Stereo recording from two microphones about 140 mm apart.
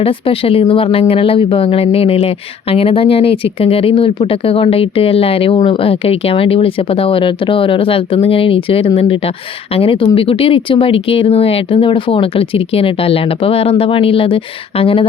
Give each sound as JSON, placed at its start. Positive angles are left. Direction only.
{"t": 0.0, "sound": "speech", "side_deg": 40}